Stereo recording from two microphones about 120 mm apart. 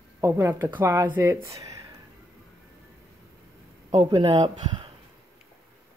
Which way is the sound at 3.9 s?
45° right (ahead or behind).